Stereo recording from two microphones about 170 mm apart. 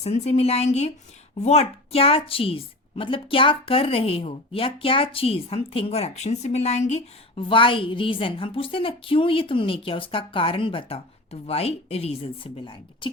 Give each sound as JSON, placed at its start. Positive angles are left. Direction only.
{"t": 0.0, "sound": "a woman's voice", "side_deg": 40}